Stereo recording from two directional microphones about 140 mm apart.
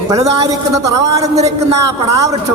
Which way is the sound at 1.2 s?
50° right (ahead or behind).